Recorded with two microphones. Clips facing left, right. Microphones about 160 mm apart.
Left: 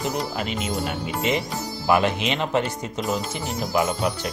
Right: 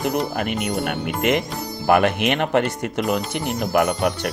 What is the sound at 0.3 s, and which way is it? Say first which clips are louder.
Speech: right 3 dB; 60° right (ahead or behind).